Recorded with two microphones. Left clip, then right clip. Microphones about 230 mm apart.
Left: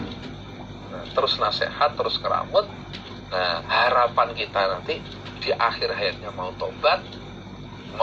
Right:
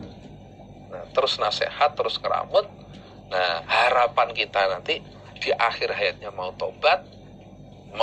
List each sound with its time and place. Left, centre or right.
1.1 s a man's voice: right